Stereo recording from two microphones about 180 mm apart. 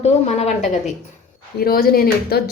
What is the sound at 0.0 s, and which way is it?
Speech, 35° left (ahead or behind).